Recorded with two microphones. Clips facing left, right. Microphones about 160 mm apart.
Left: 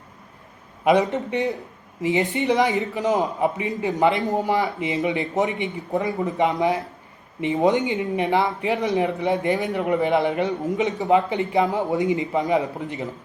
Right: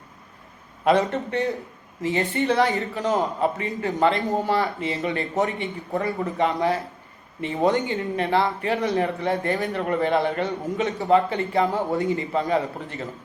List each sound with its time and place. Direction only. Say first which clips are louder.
1.1 s a man's voice: left 1 dB; 20° left (ahead or behind)